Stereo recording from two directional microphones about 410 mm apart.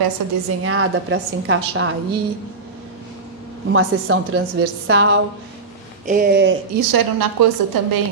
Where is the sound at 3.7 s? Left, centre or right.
Right.